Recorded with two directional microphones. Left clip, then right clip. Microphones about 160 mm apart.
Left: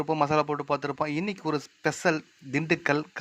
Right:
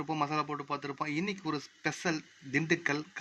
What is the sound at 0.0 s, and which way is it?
A man's voice, 35° left (ahead or behind).